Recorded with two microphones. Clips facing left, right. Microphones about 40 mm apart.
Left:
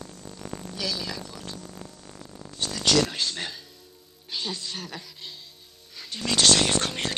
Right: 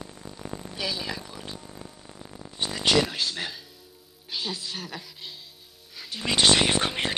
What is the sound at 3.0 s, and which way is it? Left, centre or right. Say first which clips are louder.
Speech: even; centre.